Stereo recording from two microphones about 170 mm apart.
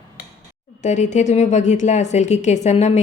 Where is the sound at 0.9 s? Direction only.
45° left (ahead or behind).